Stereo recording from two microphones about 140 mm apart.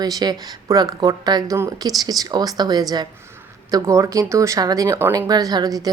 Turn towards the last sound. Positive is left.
turn(degrees=-25)  # may be behind; listen again after turning